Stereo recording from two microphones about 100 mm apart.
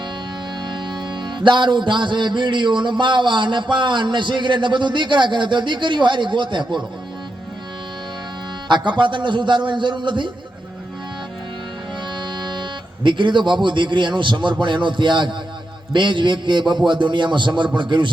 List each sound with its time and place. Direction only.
0.7 s music: 50° right (ahead or behind)
8.6 s music: 50° right (ahead or behind)
12.2 s speech: 50° right (ahead or behind)
14.6 s music: 50° right (ahead or behind)